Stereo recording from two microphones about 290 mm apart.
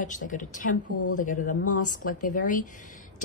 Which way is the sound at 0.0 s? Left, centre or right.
Left.